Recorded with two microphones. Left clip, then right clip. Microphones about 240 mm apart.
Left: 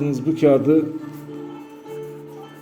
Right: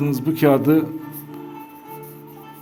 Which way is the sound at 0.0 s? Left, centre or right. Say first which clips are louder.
Even; right.